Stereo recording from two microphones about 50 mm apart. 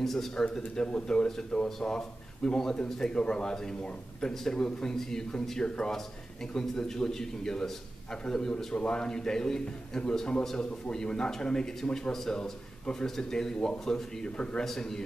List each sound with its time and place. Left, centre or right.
0.0 s a man's voice: centre
14.6 s a man's voice: centre